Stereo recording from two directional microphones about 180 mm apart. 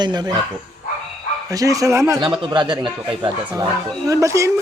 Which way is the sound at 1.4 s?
20° right (ahead or behind).